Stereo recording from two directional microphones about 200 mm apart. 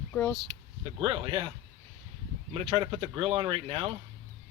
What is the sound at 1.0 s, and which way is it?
Speech, 25° right (ahead or behind).